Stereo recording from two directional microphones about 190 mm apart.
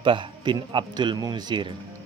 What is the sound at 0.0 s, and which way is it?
Speech, 25° right (ahead or behind).